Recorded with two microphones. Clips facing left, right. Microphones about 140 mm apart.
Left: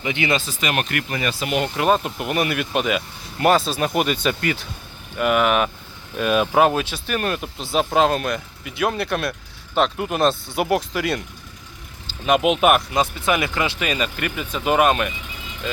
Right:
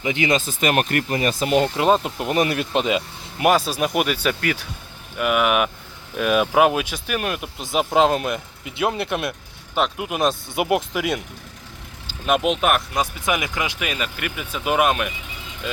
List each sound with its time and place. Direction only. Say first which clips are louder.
0.0 s speech: right 2 dB; 40° right (ahead or behind)
1.5 s speech: right 2 dB; 25° right (ahead or behind)
3.4 s speech: even; 10° right (ahead or behind)
9.7 s speech: left 2 dB; 5° right (ahead or behind)
12.2 s speech: left 3 dB; centre (ahead or behind)
13.0 s speech: left 3 dB; 15° right (ahead or behind)